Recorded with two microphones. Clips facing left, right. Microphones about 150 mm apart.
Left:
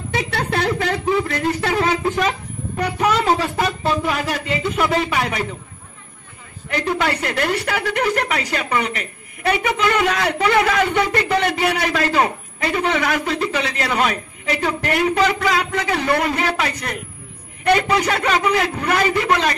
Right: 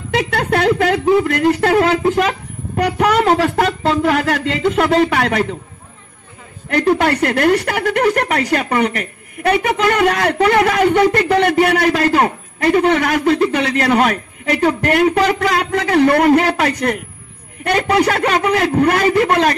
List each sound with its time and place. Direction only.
0.1 s a man's voice: 60° right (ahead or behind)
6.7 s a man's voice: 55° right (ahead or behind)